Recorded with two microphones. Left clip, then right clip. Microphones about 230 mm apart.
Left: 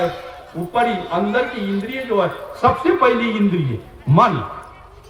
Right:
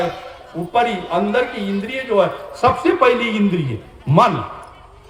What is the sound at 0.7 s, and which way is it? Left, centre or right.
A man's voice, right.